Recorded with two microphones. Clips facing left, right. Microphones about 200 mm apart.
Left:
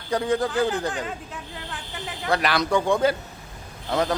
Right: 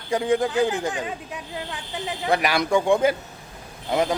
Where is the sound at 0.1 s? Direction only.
15° right (ahead or behind).